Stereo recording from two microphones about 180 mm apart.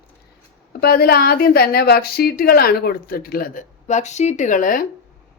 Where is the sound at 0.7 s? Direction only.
60° left (ahead or behind).